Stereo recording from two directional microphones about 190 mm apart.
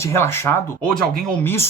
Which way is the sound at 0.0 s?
15° left (ahead or behind).